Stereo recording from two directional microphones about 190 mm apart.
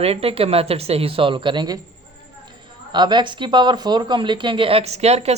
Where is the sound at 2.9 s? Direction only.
25° right (ahead or behind).